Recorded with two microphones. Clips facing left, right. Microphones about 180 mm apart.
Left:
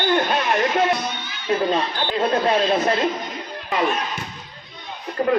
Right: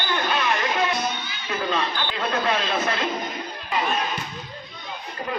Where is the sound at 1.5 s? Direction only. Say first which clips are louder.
Left 5 dB; 30° left (ahead or behind).